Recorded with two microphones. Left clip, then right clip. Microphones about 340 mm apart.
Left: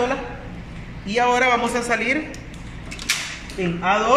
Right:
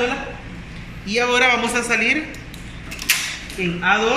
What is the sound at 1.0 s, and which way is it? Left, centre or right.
A man's voice, left.